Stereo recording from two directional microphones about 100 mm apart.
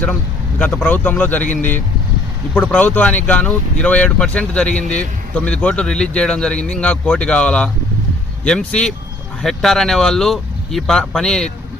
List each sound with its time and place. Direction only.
0.6 s speech: 20° left (ahead or behind)
2.6 s speech: 15° left (ahead or behind)